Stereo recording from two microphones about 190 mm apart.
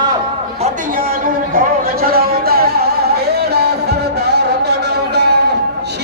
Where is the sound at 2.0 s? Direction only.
50° right (ahead or behind).